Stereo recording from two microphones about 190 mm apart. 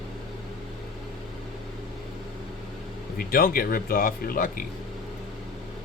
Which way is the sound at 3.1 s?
50° left (ahead or behind).